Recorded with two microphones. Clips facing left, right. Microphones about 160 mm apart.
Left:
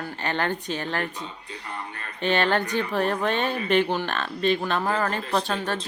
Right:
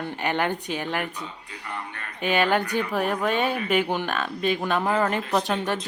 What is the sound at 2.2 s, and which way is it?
A woman's voice, 10° right (ahead or behind).